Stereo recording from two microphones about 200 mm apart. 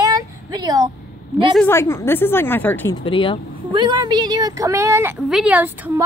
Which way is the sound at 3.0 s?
25° left (ahead or behind).